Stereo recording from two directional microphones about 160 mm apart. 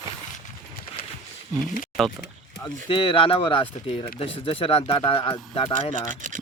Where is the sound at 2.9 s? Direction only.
35° left (ahead or behind).